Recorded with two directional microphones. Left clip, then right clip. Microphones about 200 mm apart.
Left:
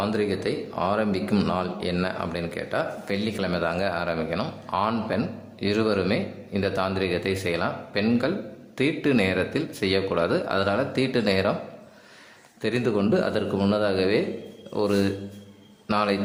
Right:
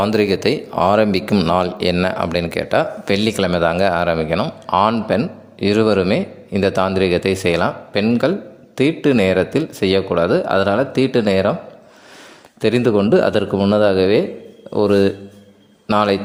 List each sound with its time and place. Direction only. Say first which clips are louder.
0.0 s speech: right 10 dB; 40° right (ahead or behind)
12.6 s speech: right 9 dB; 40° right (ahead or behind)